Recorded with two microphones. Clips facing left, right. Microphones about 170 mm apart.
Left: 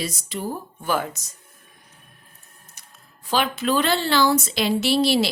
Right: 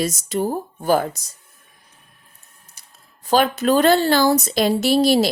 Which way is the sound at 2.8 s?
30° right (ahead or behind).